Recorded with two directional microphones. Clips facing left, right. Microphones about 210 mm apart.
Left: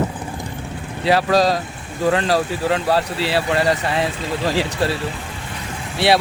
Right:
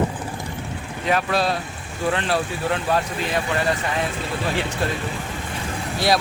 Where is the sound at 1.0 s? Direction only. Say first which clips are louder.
Left 5 dB; 35° left (ahead or behind).